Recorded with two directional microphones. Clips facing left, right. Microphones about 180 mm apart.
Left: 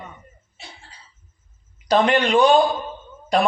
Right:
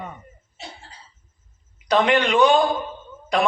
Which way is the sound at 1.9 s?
35° left (ahead or behind).